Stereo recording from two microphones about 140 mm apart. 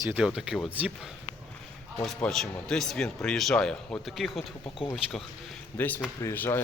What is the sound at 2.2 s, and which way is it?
A man's voice, 5° left (ahead or behind).